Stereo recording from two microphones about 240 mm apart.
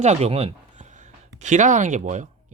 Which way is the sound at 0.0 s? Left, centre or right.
Right.